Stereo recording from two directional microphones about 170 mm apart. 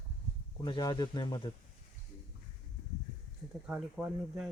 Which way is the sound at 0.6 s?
25° left (ahead or behind).